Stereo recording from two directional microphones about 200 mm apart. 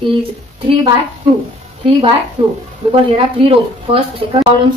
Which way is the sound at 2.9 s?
30° right (ahead or behind).